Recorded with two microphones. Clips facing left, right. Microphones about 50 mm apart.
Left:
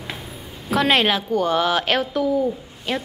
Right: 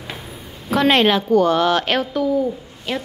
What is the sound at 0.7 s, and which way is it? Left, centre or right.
Speech, centre.